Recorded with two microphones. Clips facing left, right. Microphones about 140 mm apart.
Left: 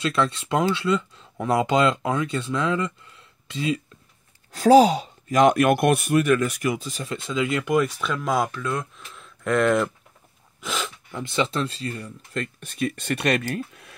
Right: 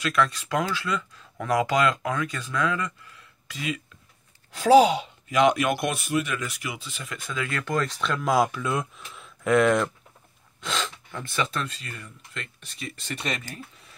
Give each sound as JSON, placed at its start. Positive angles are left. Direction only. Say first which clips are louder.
{"t": 0.0, "sound": "speech", "louder": "left 1 dB", "side_deg": 30}
{"t": 4.5, "sound": "speech", "louder": "left 2 dB", "side_deg": 40}